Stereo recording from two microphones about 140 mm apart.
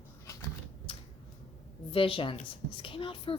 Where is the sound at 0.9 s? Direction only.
40° left (ahead or behind).